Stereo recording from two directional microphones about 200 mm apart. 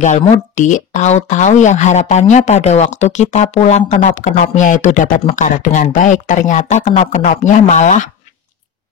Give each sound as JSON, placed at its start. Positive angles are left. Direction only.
{"t": 0.0, "sound": "speech", "side_deg": 40}